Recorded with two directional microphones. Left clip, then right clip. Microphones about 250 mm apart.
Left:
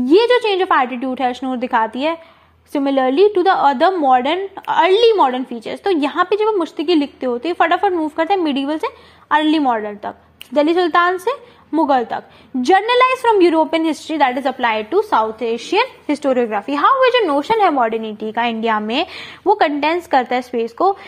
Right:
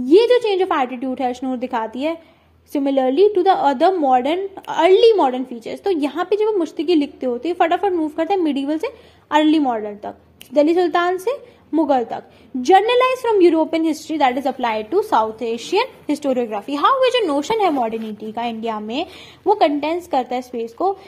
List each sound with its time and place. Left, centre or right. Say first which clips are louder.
0.0 s a woman's voice: left 1 dB; centre
20.7 s speech: left 4 dB; left